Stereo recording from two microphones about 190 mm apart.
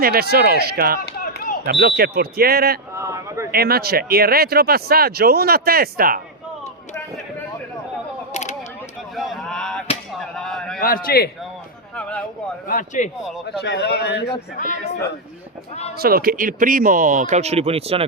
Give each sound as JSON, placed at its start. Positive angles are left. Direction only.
{"t": 0.0, "sound": "speech", "side_deg": -55}
{"t": 0.9, "sound": "chop", "side_deg": 50}
{"t": 1.6, "sound": "speech", "side_deg": -55}
{"t": 2.9, "sound": "a sound", "side_deg": -15}
{"t": 3.5, "sound": "speech", "side_deg": -55}
{"t": 8.3, "sound": "a sound", "side_deg": 40}
{"t": 9.1, "sound": "a sound", "side_deg": 0}
{"t": 10.8, "sound": "a man's voice", "side_deg": 50}
{"t": 11.9, "sound": "a sound", "side_deg": 5}
{"t": 12.6, "sound": "speech", "side_deg": 40}
{"t": 13.2, "sound": "speech", "side_deg": 0}
{"t": 13.6, "sound": "a man's voice", "side_deg": 60}
{"t": 16.0, "sound": "speech", "side_deg": -50}